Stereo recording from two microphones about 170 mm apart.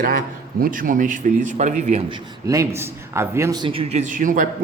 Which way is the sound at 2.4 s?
20° right (ahead or behind).